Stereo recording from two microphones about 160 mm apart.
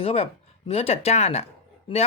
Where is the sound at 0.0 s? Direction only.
35° left (ahead or behind).